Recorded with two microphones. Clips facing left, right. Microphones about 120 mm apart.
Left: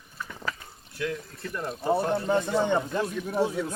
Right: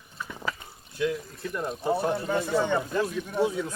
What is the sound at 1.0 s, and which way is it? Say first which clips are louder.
Speech: right 4 dB; 20° right (ahead or behind).